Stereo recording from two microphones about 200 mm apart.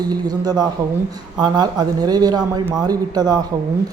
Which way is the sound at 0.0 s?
20° right (ahead or behind).